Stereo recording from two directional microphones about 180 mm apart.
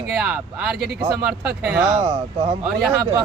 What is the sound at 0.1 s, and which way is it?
Speech, 5° right (ahead or behind).